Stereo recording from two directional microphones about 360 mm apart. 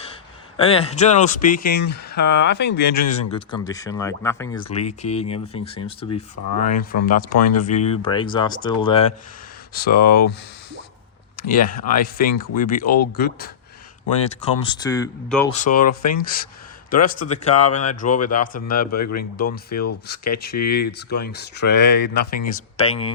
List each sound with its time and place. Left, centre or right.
0.1 s speech: centre
3.1 s speech: centre
11.3 s speech: left
12.2 s speech: left
12.5 s speech: left
14.8 s speech: centre
15.5 s speech: left